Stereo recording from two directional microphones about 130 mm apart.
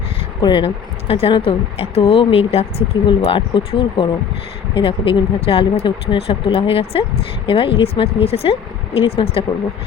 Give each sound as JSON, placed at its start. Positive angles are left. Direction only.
{"t": 0.4, "sound": "speech", "side_deg": 40}